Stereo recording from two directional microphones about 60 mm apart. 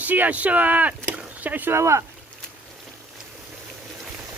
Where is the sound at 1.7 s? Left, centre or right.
Right.